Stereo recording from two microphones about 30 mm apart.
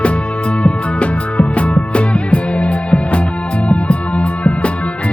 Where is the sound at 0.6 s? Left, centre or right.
Left.